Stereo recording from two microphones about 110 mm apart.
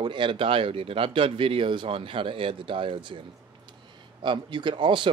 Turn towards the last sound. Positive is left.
turn(degrees=-50)  # may be behind; listen again after turning